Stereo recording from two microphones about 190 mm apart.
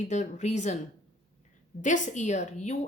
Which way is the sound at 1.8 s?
40° left (ahead or behind).